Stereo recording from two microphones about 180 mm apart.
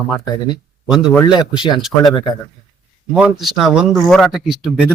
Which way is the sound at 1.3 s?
25° left (ahead or behind).